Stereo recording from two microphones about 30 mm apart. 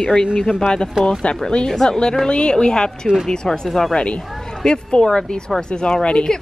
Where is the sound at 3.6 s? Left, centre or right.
Centre.